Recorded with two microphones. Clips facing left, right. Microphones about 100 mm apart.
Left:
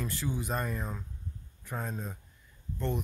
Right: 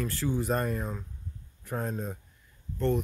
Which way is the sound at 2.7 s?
10° left (ahead or behind).